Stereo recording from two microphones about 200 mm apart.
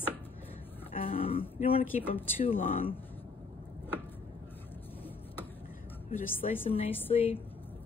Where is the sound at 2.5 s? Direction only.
45° left (ahead or behind).